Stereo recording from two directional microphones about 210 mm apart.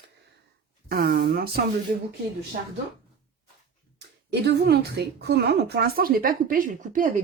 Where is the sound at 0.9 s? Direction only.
45° right (ahead or behind).